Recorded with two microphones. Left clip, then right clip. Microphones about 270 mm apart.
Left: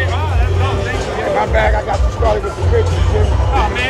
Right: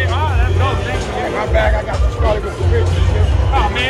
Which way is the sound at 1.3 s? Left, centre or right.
Left.